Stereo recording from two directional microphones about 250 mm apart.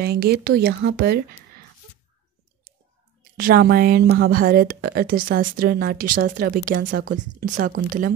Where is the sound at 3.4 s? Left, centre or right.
Right.